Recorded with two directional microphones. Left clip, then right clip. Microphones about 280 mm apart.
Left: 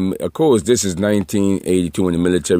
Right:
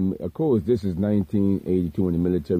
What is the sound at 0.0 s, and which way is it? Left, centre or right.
Speech, centre.